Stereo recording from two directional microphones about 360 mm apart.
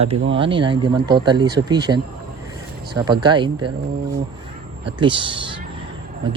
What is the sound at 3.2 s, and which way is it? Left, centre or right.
Speech, centre.